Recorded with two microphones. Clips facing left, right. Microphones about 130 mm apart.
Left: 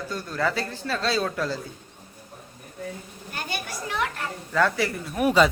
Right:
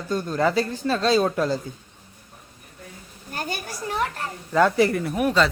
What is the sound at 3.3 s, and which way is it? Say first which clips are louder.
Speech: right 2 dB; 40° right (ahead or behind).